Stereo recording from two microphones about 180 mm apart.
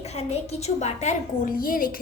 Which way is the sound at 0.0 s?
35° left (ahead or behind).